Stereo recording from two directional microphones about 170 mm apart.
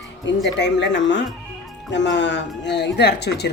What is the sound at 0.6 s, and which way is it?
Speech, 90° left.